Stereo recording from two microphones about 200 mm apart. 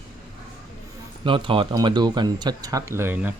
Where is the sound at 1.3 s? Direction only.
25° right (ahead or behind).